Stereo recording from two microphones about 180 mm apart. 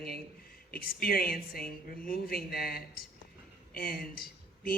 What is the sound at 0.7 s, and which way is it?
Speech, 55° left (ahead or behind).